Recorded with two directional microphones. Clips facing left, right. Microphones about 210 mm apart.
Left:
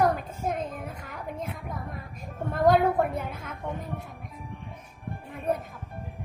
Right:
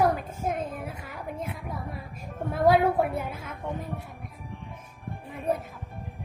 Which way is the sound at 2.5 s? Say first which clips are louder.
Even; 5° right (ahead or behind).